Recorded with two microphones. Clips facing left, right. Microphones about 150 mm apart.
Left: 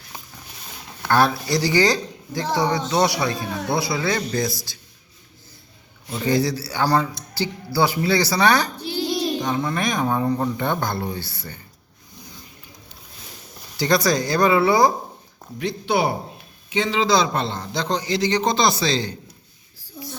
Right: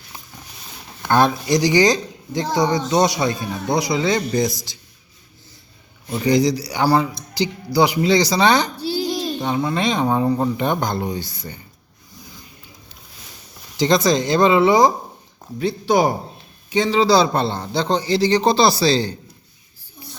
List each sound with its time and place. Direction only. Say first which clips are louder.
1.0 s speech: right 2 dB; 20° right (ahead or behind)
6.1 s a man's voice: right 4 dB; 15° right (ahead or behind)
9.0 s a sound: even; centre (ahead or behind)
9.7 s a man's voice: right 3 dB; 20° right (ahead or behind)
13.7 s speech: right 3 dB; 20° right (ahead or behind)
15.5 s a man's voice: right 4 dB; 35° right (ahead or behind)
20.0 s a sound: left 6 dB; 80° left